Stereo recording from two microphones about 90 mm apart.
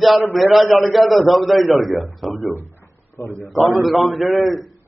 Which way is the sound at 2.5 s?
25° left (ahead or behind).